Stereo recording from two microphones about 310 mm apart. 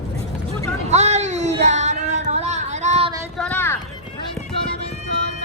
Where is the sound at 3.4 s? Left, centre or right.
Centre.